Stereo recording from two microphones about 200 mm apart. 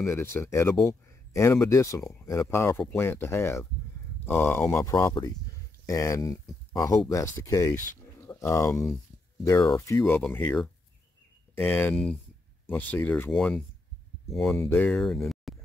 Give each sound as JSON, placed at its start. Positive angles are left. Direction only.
{"t": 0.0, "sound": "speech", "side_deg": 15}
{"t": 8.0, "sound": "a sound", "side_deg": 15}
{"t": 9.4, "sound": "speech", "side_deg": 15}